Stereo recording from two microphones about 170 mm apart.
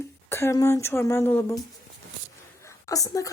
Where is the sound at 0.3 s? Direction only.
15° left (ahead or behind).